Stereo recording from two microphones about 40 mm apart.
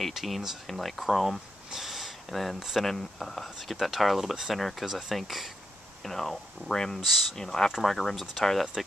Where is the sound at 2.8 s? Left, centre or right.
Centre.